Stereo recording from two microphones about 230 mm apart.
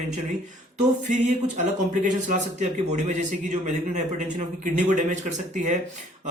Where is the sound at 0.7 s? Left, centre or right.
Right.